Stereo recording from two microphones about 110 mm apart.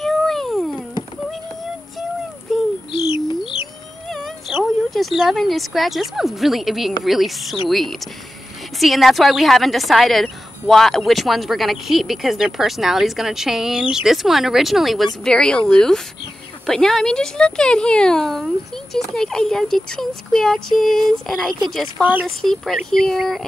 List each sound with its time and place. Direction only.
0.0 s a sound: centre (ahead or behind)
2.9 s bird: 50° left (ahead or behind)
4.1 s a sound: 5° left (ahead or behind)
4.9 s a woman's voice: centre (ahead or behind)
8.7 s a woman's voice: centre (ahead or behind)
22.0 s speech: 15° right (ahead or behind)
22.4 s a woman's voice: 5° left (ahead or behind)